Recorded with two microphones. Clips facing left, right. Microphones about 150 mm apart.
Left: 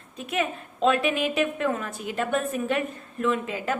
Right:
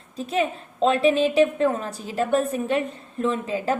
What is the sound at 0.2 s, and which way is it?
A woman's voice, 30° right (ahead or behind).